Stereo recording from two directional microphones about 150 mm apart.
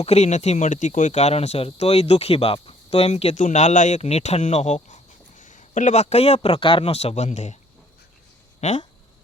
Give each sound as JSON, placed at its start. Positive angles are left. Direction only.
{"t": 0.0, "sound": "speech", "side_deg": 45}
{"t": 3.3, "sound": "speech", "side_deg": 55}
{"t": 8.6, "sound": "speech", "side_deg": 50}